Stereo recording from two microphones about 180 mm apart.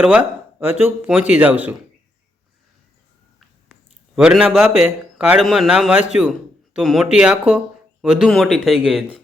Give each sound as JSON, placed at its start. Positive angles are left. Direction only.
{"t": 0.0, "sound": "speech", "side_deg": -5}
{"t": 4.1, "sound": "a man's voice", "side_deg": -5}